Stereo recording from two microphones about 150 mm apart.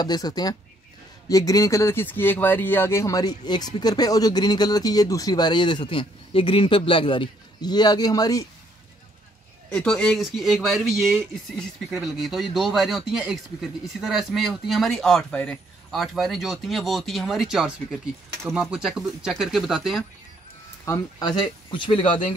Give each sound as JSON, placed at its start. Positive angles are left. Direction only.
{"t": 0.0, "sound": "speech", "side_deg": 25}
{"t": 9.7, "sound": "speech", "side_deg": 5}
{"t": 20.8, "sound": "speech", "side_deg": 25}